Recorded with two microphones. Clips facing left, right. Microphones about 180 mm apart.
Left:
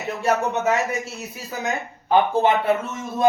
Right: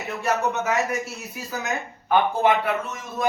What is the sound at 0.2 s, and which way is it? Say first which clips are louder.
Speech: left 2 dB; 25° left (ahead or behind).